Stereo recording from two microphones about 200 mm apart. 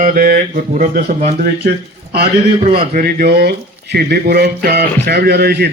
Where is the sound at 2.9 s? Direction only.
50° right (ahead or behind).